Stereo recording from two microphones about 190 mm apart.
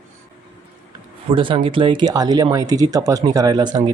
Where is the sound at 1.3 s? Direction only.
25° right (ahead or behind).